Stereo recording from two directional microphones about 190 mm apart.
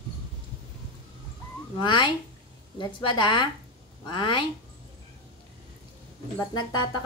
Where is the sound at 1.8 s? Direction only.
25° left (ahead or behind).